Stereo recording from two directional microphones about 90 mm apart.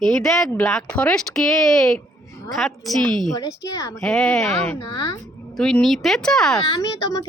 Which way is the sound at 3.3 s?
40° left (ahead or behind).